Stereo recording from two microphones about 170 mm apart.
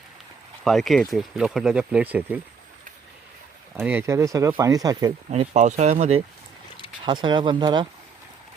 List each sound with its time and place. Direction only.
0.6 s speech: centre (ahead or behind)
3.8 s speech: 15° right (ahead or behind)
5.3 s speech: 45° right (ahead or behind)
7.0 s speech: 30° right (ahead or behind)